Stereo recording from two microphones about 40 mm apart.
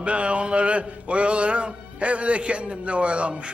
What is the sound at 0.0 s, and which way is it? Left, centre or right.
Music, right.